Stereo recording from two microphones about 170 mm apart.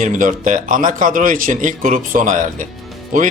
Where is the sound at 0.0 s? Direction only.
50° right (ahead or behind).